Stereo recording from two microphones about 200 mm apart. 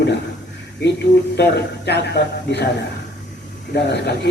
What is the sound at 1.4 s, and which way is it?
A man's voice, 55° left (ahead or behind).